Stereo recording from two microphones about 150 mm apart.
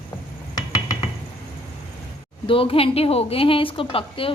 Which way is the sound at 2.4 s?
35° left (ahead or behind).